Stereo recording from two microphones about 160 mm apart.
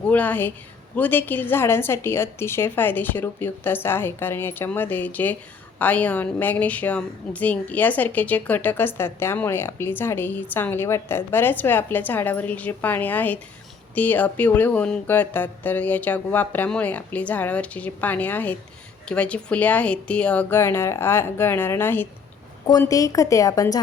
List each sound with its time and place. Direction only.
0.1 s a woman's voice: 10° left (ahead or behind)